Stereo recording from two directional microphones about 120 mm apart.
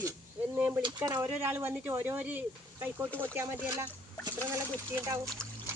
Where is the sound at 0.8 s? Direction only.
35° right (ahead or behind).